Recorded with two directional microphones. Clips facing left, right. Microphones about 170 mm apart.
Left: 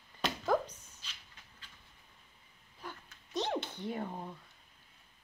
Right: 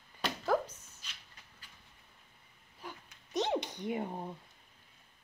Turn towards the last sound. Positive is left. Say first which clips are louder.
# right 2 dB
turn(degrees=-20)  # may be behind; listen again after turning